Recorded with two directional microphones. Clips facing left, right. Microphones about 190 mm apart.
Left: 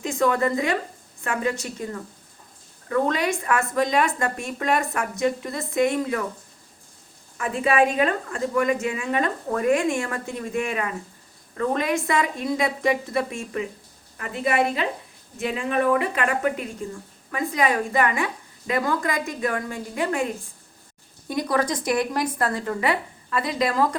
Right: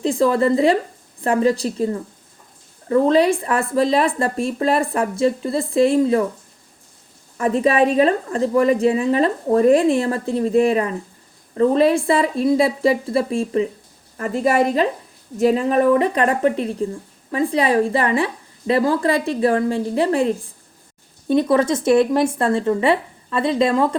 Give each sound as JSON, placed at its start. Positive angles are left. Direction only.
{"t": 0.0, "sound": "a woman's voice", "side_deg": -30}
{"t": 7.3, "sound": "a woman's voice", "side_deg": -35}
{"t": 21.5, "sound": "a woman's voice", "side_deg": -25}